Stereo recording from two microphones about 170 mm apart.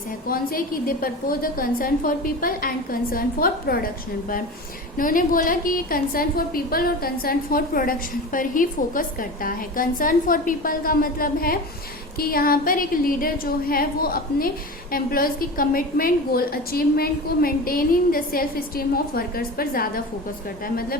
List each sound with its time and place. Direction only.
0.3 s a woman's voice: 55° left (ahead or behind)
4.9 s a woman's voice: 55° left (ahead or behind)